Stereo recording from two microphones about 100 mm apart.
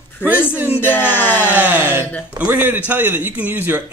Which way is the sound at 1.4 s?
15° right (ahead or behind).